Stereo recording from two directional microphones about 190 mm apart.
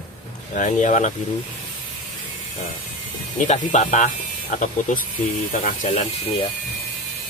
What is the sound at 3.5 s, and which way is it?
Speech, 40° left (ahead or behind).